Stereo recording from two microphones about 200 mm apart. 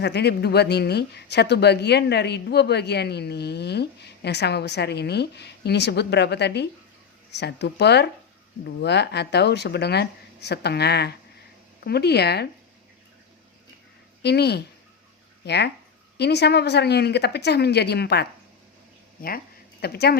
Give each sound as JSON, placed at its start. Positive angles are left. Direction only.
{"t": 0.0, "sound": "speech", "side_deg": 55}
{"t": 14.2, "sound": "a woman's voice", "side_deg": 55}
{"t": 19.8, "sound": "speech", "side_deg": 55}